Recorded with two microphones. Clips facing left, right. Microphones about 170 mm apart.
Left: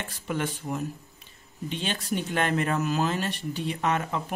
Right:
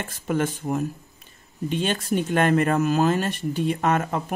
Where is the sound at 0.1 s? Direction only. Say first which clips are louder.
Right 7 dB; 45° right (ahead or behind).